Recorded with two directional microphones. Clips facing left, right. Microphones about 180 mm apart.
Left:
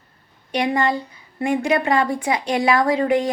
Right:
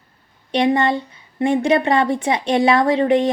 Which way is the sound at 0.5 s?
25° right (ahead or behind).